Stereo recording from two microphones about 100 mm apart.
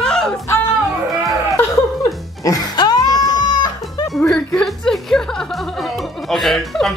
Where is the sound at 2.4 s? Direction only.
45° left (ahead or behind).